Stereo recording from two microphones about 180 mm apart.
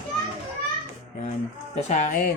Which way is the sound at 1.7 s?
40° left (ahead or behind).